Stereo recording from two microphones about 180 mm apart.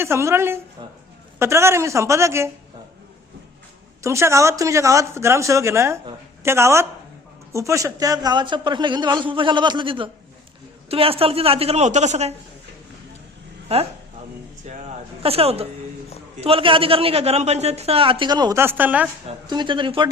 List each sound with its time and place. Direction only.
0.0 s speech: 15° right (ahead or behind)
4.0 s a man's voice: 15° right (ahead or behind); by 12.3 s 40° right (ahead or behind)
14.7 s a man's voice: 40° right (ahead or behind); by 19.0 s 10° right (ahead or behind)
19.5 s a man's voice: 25° right (ahead or behind)